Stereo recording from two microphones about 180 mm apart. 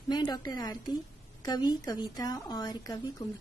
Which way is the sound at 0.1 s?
20° left (ahead or behind).